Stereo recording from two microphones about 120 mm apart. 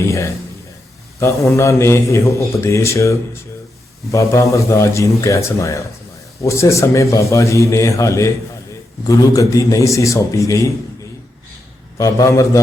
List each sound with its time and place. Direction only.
0.0 s a sound: 25° left (ahead or behind)
1.2 s a man's voice: 25° left (ahead or behind)
11.9 s a man's voice: 25° left (ahead or behind)